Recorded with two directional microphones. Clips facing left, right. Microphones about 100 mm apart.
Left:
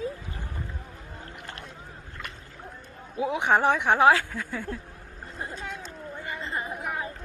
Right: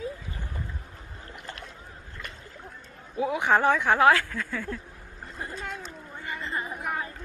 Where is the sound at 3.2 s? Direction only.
20° left (ahead or behind).